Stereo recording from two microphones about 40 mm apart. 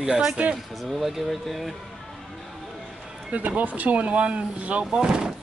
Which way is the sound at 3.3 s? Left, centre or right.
Right.